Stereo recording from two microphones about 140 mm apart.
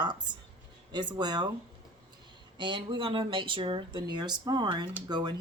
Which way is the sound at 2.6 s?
35° right (ahead or behind).